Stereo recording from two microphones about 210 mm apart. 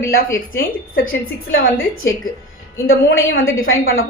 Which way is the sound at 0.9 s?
75° left (ahead or behind).